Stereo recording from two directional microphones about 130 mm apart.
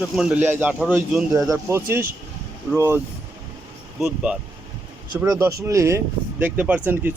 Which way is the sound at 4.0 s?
10° right (ahead or behind).